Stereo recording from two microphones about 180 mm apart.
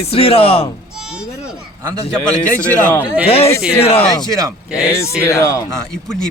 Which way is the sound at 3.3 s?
35° left (ahead or behind).